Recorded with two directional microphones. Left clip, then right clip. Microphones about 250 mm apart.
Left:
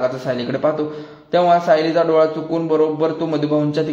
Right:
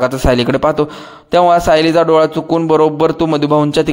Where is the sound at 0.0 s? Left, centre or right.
Right.